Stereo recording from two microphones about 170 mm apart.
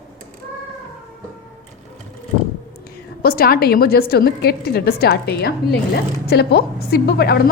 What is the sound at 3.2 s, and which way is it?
A woman's voice, 60° left (ahead or behind).